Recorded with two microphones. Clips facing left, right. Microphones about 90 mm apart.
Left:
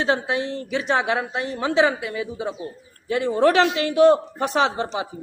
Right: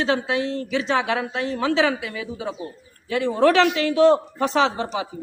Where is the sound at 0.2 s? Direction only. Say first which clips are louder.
Right 1 dB; 20° left (ahead or behind).